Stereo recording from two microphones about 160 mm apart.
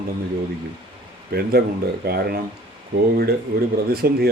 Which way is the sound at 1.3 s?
75° right (ahead or behind).